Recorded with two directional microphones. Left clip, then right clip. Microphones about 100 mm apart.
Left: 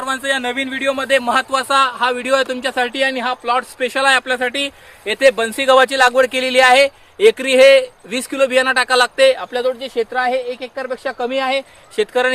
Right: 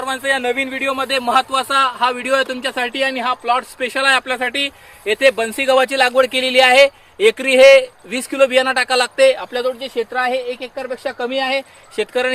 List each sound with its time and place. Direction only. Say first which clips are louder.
0.0 s speech: right 1 dB; 25° left (ahead or behind)